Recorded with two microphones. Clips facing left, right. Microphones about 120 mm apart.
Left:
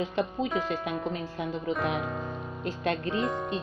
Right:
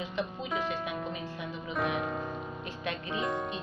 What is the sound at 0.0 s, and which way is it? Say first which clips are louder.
Speech: left 6 dB; 60° left (ahead or behind).